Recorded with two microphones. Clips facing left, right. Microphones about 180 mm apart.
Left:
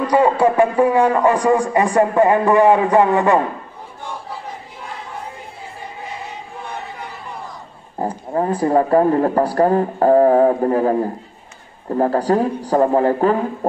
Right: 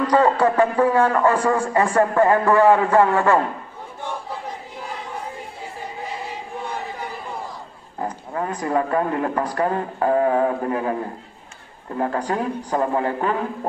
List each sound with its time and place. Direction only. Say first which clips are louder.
0.0 s a man's voice: left 2 dB; 10° left (ahead or behind)
8.0 s a man's voice: left 6 dB; 30° left (ahead or behind)